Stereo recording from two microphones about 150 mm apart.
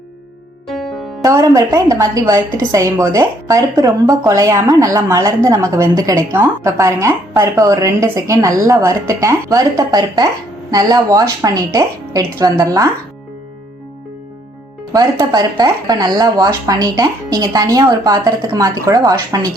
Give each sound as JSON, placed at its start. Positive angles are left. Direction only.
{"t": 1.2, "sound": "a woman's voice", "side_deg": -20}
{"t": 14.9, "sound": "a woman's voice", "side_deg": -25}